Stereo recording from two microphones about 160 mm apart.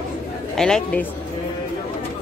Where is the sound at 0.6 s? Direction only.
5° left (ahead or behind).